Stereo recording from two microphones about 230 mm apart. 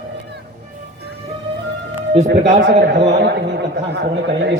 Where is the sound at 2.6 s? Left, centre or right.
Right.